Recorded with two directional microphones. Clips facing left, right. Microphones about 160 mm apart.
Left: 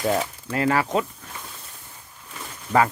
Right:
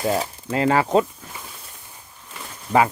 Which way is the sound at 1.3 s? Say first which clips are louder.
Right 1 dB; 5° right (ahead or behind).